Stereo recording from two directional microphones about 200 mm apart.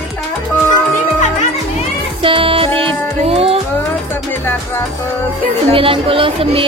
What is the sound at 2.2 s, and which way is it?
Music, 25° right (ahead or behind).